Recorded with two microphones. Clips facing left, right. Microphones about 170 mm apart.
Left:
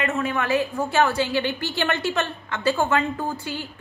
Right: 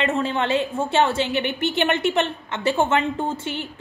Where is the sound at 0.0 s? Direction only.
30° right (ahead or behind).